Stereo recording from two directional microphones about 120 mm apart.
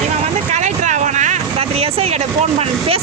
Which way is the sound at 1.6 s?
55° right (ahead or behind).